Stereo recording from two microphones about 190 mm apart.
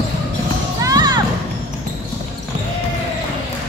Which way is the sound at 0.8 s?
20° right (ahead or behind).